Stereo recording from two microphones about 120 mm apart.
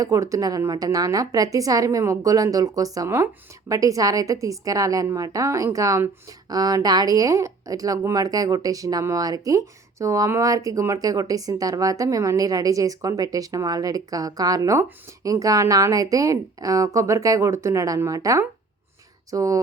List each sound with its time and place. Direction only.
0.0 s speech: 30° right (ahead or behind)